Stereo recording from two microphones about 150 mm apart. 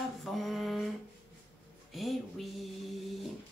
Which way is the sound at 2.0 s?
Centre (ahead or behind).